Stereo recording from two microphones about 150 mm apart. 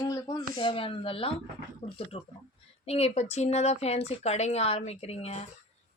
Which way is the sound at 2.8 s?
40° left (ahead or behind).